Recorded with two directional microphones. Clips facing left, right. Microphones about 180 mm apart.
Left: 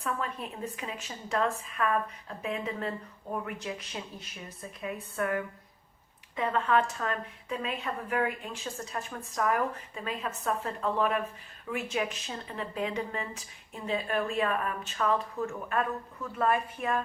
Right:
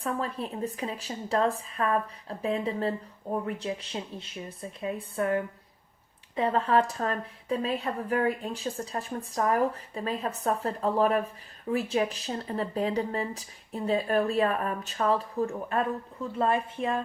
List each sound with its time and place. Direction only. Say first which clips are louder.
0.0 s speech: right 3 dB; 35° right (ahead or behind)